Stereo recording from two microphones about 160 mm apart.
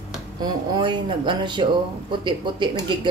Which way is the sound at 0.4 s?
30° right (ahead or behind).